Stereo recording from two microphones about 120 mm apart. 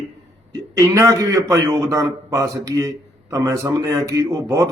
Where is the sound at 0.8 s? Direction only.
25° right (ahead or behind).